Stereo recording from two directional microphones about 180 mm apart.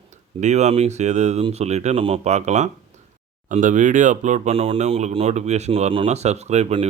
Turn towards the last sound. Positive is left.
turn(degrees=-35)  # may be behind; listen again after turning